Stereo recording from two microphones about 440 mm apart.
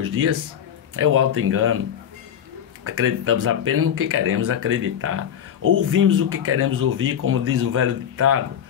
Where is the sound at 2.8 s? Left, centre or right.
Right.